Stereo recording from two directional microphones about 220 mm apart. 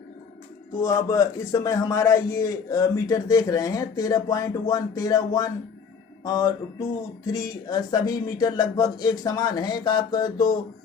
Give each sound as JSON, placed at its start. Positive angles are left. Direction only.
{"t": 0.8, "sound": "a man's voice", "side_deg": 15}